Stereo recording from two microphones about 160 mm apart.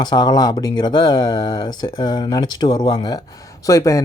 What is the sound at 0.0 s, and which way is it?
Speech, 25° left (ahead or behind).